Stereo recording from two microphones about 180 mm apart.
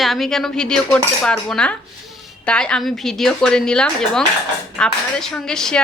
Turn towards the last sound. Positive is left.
turn(degrees=5)  # may be behind; listen again after turning